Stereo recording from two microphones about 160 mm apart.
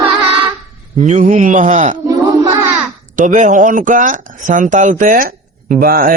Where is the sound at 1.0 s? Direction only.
50° right (ahead or behind).